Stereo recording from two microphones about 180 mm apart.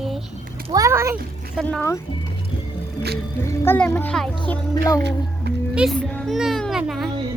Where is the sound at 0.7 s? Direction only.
15° right (ahead or behind).